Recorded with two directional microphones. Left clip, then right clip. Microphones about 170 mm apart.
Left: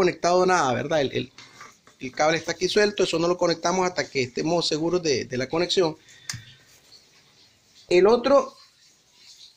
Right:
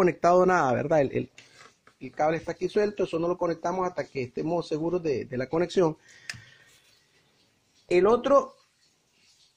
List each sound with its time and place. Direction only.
0.0 s speech: 45° right (ahead or behind)
0.4 s speech: 25° right (ahead or behind)
2.0 s speech: 20° right (ahead or behind)
7.9 s speech: 20° right (ahead or behind)